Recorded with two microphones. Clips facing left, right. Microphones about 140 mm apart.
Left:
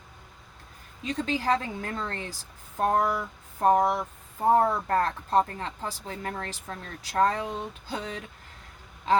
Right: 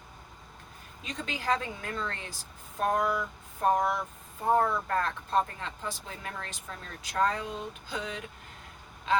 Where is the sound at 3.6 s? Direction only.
40° left (ahead or behind).